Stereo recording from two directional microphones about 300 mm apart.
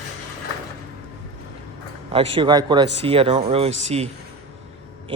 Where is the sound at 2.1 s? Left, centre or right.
Centre.